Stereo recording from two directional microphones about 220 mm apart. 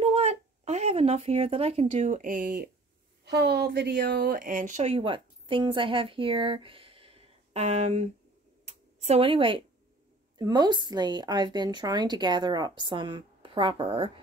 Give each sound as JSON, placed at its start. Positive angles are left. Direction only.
{"t": 0.0, "sound": "speech", "side_deg": -30}
{"t": 8.6, "sound": "a sound", "side_deg": -30}
{"t": 10.3, "sound": "a woman's voice", "side_deg": -20}